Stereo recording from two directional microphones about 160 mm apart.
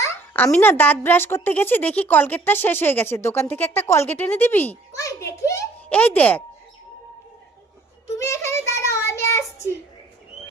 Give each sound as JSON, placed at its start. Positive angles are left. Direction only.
{"t": 0.0, "sound": "a woman's voice", "side_deg": 15}
{"t": 8.2, "sound": "a child's voice", "side_deg": 20}